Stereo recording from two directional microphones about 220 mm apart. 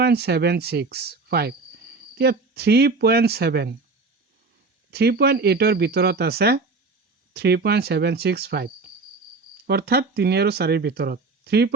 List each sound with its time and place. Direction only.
0.0 s speech: 45° right (ahead or behind)
4.9 s speech: 45° right (ahead or behind)